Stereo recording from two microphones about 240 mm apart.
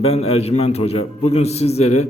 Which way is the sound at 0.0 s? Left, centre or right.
Left.